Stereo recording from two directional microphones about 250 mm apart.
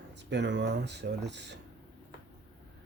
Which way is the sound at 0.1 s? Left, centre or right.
Right.